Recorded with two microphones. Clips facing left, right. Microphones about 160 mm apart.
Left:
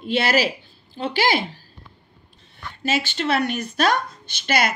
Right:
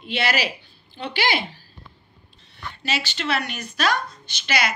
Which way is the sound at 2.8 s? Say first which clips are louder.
Left 5 dB; 50° left (ahead or behind).